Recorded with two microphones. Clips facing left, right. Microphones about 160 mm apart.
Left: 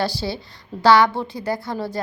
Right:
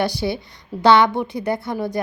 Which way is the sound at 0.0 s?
20° right (ahead or behind).